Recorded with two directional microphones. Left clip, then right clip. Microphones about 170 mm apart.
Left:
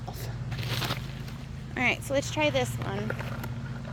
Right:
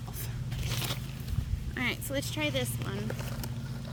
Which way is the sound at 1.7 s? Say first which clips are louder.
Left 6 dB; 40° right (ahead or behind).